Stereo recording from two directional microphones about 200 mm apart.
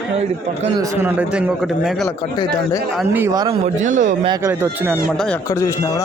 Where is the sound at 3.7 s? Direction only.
40° right (ahead or behind).